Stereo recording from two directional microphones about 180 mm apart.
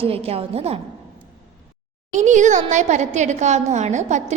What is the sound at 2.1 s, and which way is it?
A woman's voice, 40° right (ahead or behind).